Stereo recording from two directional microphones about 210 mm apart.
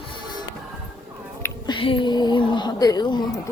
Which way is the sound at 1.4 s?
20° left (ahead or behind).